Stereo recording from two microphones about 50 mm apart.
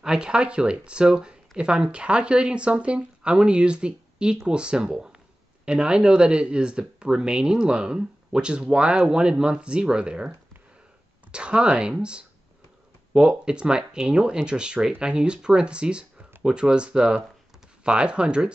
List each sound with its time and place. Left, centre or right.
0.0 s speech: centre
11.3 s speech: right
13.3 s speech: centre